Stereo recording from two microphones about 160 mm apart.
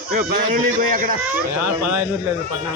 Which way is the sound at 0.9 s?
60° right (ahead or behind).